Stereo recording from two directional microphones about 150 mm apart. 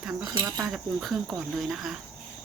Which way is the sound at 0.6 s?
Centre (ahead or behind).